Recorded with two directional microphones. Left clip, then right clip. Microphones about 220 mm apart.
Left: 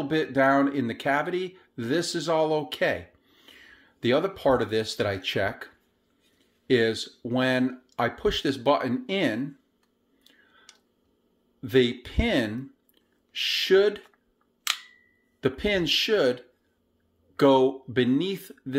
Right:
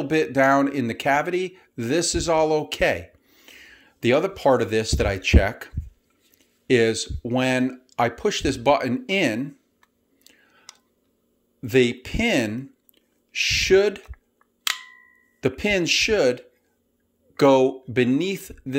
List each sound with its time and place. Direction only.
0.0 s speech: 25° right (ahead or behind)
6.7 s speech: 25° right (ahead or behind)
10.2 s chewing: 25° right (ahead or behind)
11.6 s speech: 25° right (ahead or behind)
15.4 s speech: 25° right (ahead or behind)